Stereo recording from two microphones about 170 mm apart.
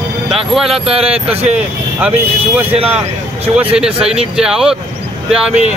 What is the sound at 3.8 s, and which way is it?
Speech, 5° right (ahead or behind).